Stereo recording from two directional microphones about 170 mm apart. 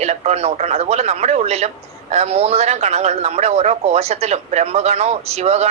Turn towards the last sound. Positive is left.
turn(degrees=-40)  # may be behind; listen again after turning